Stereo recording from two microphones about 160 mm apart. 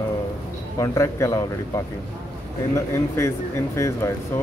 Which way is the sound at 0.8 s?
20° left (ahead or behind).